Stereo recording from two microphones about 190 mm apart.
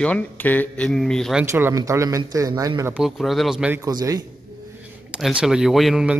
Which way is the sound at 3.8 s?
20° right (ahead or behind).